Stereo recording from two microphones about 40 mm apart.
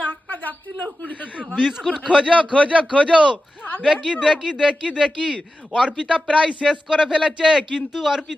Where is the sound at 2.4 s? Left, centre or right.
Left.